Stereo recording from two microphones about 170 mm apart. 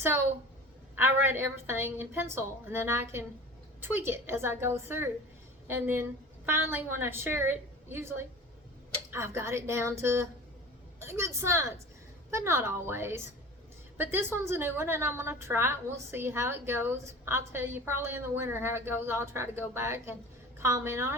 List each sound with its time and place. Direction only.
0.0 s a woman's voice: 15° right (ahead or behind)